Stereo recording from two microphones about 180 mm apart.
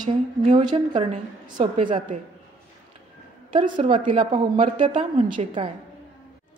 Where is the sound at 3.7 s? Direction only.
30° right (ahead or behind).